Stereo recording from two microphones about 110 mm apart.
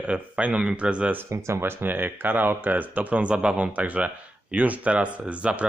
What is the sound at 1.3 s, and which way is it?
Speech, 25° right (ahead or behind).